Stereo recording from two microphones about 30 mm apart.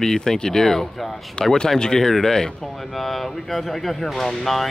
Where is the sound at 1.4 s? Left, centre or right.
Left.